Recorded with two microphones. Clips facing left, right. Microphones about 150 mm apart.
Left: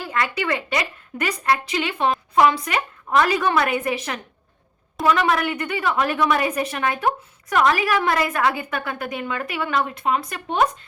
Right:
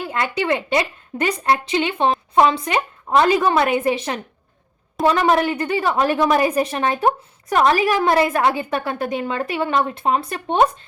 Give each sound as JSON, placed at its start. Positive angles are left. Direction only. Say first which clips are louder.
{"t": 0.0, "sound": "a woman's voice", "louder": "right 2 dB", "side_deg": -25}